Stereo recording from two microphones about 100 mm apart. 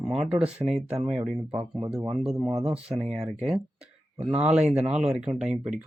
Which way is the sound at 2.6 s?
10° right (ahead or behind).